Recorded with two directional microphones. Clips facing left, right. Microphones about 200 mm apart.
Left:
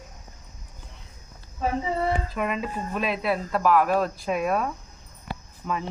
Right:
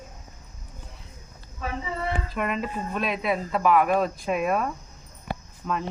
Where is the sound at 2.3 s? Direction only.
Centre (ahead or behind).